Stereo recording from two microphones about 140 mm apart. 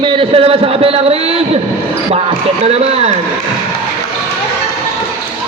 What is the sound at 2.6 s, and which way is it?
Speech, 50° right (ahead or behind).